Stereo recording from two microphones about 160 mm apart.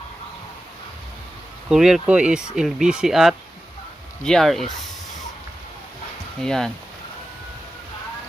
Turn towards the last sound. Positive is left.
turn(degrees=5)  # may be behind; listen again after turning